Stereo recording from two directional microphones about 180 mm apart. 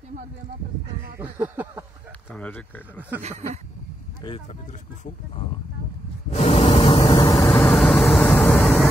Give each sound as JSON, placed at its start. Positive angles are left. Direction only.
{"t": 1.2, "sound": "speech", "side_deg": -10}
{"t": 2.3, "sound": "speech", "side_deg": 10}
{"t": 3.2, "sound": "a sound", "side_deg": -40}
{"t": 6.3, "sound": "a sound", "side_deg": 40}
{"t": 6.6, "sound": "vehicle", "side_deg": 25}
{"t": 7.5, "sound": "vehicle", "side_deg": 5}